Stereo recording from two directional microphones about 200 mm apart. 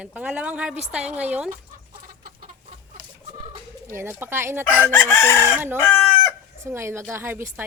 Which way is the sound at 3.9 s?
10° right (ahead or behind).